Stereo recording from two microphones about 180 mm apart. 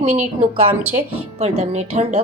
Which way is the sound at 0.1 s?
40° right (ahead or behind).